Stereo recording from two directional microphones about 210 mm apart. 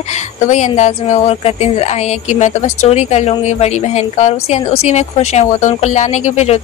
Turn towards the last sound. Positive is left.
turn(degrees=35)  # may be behind; listen again after turning